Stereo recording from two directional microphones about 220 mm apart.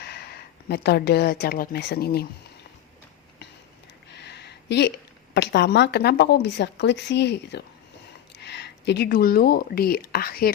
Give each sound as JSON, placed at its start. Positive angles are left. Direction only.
{"t": 0.0, "sound": "speech", "side_deg": 45}
{"t": 4.1, "sound": "a sound", "side_deg": 50}
{"t": 5.3, "sound": "speech", "side_deg": 50}